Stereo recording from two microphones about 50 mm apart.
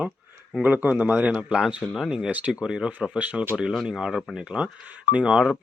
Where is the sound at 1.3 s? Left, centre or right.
Right.